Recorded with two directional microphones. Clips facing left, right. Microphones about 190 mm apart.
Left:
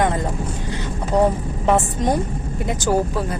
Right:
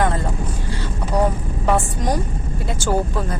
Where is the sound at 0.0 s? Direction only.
15° left (ahead or behind).